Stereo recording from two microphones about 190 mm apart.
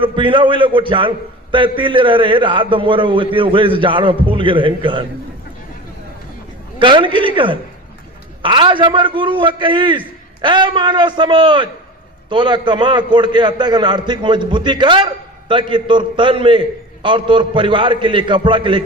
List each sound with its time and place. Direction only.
0.0 s a man's voice: 25° right (ahead or behind)
6.7 s a man's voice: 25° right (ahead or behind)